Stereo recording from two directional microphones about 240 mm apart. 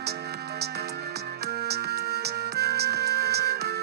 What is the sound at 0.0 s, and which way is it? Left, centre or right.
Music, right.